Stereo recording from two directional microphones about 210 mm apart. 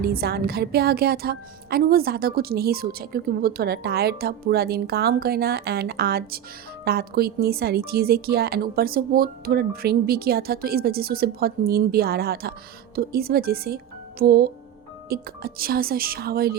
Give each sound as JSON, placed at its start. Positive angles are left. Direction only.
{"t": 0.0, "sound": "a woman's voice", "side_deg": -50}